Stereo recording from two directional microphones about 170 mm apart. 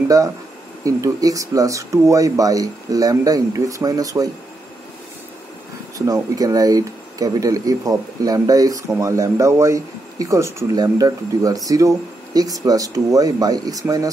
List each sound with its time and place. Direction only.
0.8 s speech: 20° right (ahead or behind)
5.9 s speech: 20° right (ahead or behind)